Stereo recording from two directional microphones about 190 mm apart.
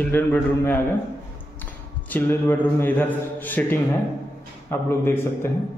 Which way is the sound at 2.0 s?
10° left (ahead or behind).